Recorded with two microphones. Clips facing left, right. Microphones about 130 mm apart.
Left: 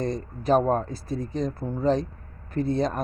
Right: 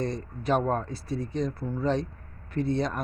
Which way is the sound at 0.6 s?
35° left (ahead or behind).